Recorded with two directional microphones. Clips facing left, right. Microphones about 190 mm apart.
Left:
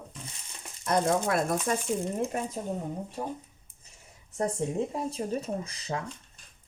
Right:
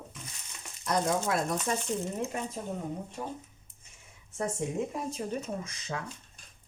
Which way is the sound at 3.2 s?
35° left (ahead or behind).